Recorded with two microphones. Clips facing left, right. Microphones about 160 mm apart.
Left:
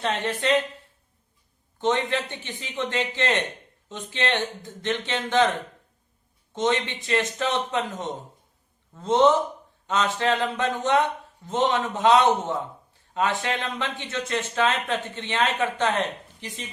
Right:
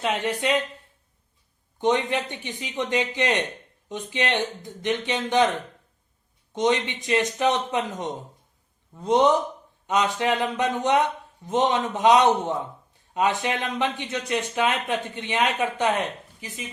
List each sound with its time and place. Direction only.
0.0 s speech: 10° right (ahead or behind)
1.8 s speech: 15° right (ahead or behind)
6.5 s speech: 15° right (ahead or behind)